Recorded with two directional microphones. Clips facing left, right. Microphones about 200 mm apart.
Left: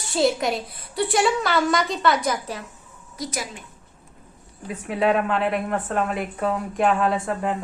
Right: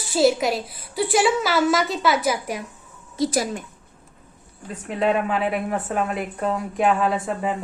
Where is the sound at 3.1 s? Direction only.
25° right (ahead or behind).